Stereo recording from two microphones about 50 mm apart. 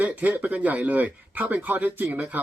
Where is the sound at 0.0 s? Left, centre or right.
Right.